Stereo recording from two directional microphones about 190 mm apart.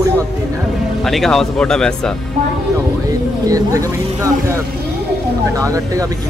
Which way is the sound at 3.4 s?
15° right (ahead or behind).